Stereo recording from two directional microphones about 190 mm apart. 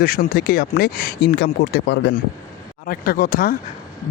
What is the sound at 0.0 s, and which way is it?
Speech, 55° left (ahead or behind).